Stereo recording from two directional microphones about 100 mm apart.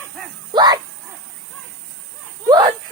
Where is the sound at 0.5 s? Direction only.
45° right (ahead or behind).